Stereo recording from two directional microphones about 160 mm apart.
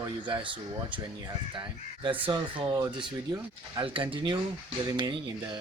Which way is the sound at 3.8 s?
35° right (ahead or behind).